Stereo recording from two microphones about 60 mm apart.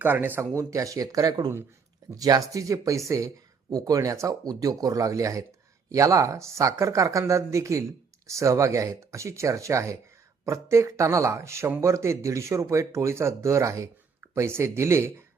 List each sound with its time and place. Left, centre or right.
0.0 s speech: right
0.5 s speech: right
14.3 s speech: right